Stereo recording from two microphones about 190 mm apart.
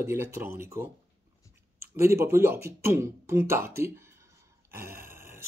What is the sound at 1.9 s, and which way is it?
Speech, 15° right (ahead or behind).